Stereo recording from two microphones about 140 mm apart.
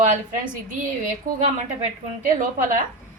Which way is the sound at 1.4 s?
55° right (ahead or behind).